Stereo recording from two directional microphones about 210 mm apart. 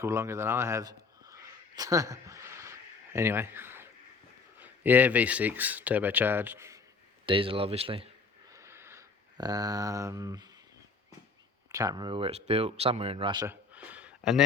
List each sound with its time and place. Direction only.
0.0 s a man's voice: 10° right (ahead or behind)
7.3 s speech: 25° right (ahead or behind)
8.5 s a sound: 10° right (ahead or behind)
11.7 s speech: 15° right (ahead or behind)